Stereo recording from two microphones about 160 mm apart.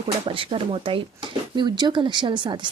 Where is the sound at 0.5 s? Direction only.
35° right (ahead or behind).